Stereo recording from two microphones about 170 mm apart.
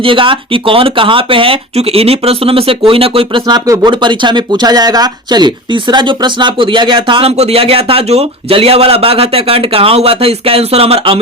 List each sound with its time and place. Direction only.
0.0 s speech: 30° right (ahead or behind)